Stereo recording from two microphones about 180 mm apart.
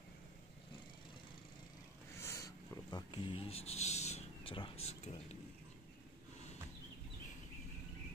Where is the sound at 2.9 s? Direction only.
30° left (ahead or behind).